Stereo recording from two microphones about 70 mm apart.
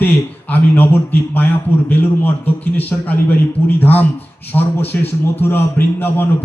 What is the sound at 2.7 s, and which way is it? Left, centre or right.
A man's voice, left.